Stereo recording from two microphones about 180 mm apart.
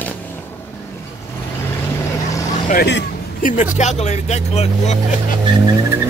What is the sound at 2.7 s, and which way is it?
Speech, 65° left (ahead or behind).